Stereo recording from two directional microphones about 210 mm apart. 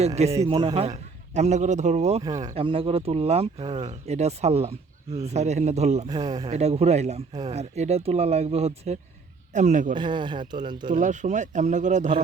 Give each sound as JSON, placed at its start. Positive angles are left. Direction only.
{"t": 0.0, "sound": "a man's voice", "side_deg": -30}
{"t": 0.3, "sound": "speech", "side_deg": -15}
{"t": 0.5, "sound": "a man's voice", "side_deg": -25}
{"t": 2.2, "sound": "a man's voice", "side_deg": -20}
{"t": 6.1, "sound": "speech", "side_deg": -20}
{"t": 6.5, "sound": "a man's voice", "side_deg": -30}
{"t": 9.9, "sound": "speech", "side_deg": -20}
{"t": 10.8, "sound": "a man's voice", "side_deg": -35}